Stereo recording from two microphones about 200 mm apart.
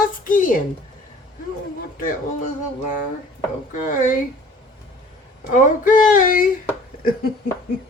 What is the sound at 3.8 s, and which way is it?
Speech, 40° left (ahead or behind).